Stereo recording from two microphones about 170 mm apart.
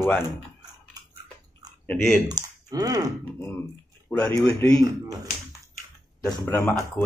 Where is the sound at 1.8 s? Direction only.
10° left (ahead or behind).